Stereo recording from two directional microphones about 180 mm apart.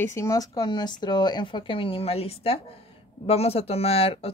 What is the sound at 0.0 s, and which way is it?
Speech, 15° left (ahead or behind).